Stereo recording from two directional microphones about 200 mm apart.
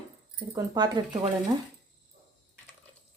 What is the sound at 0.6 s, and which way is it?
Speech, 20° right (ahead or behind).